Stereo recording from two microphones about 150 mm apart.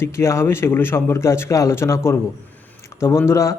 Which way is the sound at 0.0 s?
20° left (ahead or behind).